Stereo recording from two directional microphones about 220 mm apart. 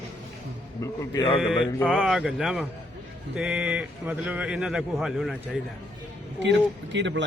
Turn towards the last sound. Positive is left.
turn(degrees=-55)  # may be behind; listen again after turning